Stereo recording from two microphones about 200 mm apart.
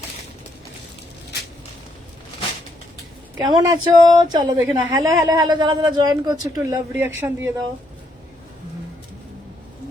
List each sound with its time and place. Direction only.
3.4 s speech: 20° right (ahead or behind)